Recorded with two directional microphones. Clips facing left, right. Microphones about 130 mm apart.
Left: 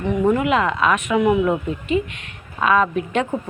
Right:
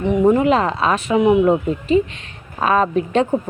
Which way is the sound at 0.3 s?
35° right (ahead or behind).